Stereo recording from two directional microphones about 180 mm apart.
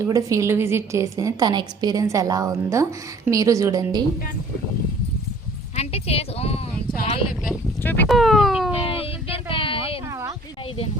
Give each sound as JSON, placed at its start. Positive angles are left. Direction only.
{"t": 0.0, "sound": "a woman's voice", "side_deg": -15}
{"t": 5.7, "sound": "speech", "side_deg": 35}
{"t": 7.8, "sound": "speech", "side_deg": 10}
{"t": 8.0, "sound": "speech", "side_deg": 0}
{"t": 8.9, "sound": "a sound", "side_deg": 30}
{"t": 10.1, "sound": "a sound", "side_deg": -15}